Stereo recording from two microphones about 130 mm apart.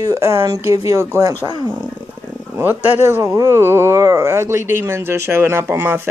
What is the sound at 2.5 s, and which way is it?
Speech, 15° right (ahead or behind).